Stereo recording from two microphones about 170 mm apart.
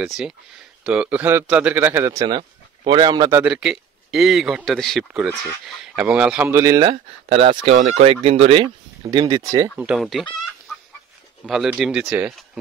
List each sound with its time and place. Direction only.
0.8 s a man's voice: 5° right (ahead or behind)
6.5 s speech: 25° right (ahead or behind)
9.8 s speech: 5° right (ahead or behind)
11.4 s speech: centre (ahead or behind)